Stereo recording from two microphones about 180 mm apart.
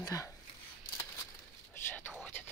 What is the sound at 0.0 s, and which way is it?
Speech, 20° left (ahead or behind).